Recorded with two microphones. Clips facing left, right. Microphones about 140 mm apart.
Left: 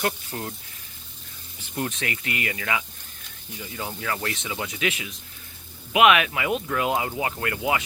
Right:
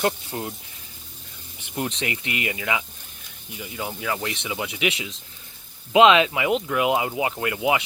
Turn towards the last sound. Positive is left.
turn(degrees=-15)  # may be behind; listen again after turning